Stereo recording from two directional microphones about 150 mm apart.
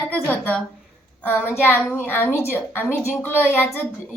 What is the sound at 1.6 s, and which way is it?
A woman's voice, 15° left (ahead or behind).